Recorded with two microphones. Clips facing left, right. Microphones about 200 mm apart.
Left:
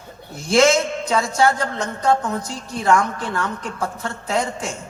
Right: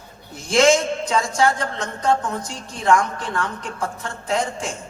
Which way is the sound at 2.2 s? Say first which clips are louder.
Left 2 dB; 30° right (ahead or behind).